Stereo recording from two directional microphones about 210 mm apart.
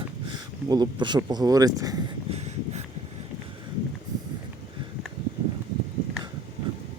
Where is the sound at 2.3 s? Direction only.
30° right (ahead or behind).